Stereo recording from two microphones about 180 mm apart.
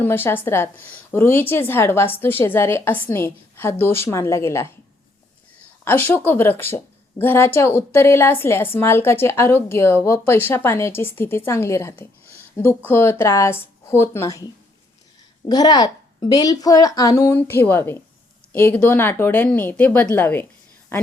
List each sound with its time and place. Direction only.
0.0 s a woman's voice: 10° left (ahead or behind)
5.8 s a woman's voice: 10° left (ahead or behind)